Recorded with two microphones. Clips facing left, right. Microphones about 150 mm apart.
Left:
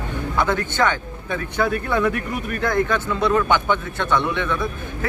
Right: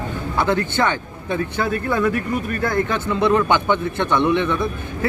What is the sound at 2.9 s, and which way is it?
A man's voice, 15° right (ahead or behind).